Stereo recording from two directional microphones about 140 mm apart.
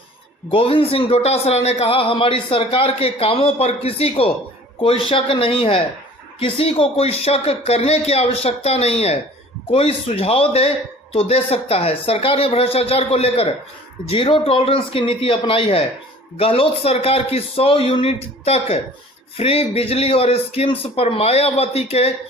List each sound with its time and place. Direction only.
0.5 s a man's voice: 40° left (ahead or behind)